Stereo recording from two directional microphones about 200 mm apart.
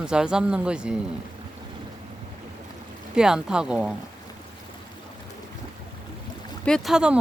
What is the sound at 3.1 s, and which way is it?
Speech, 5° right (ahead or behind).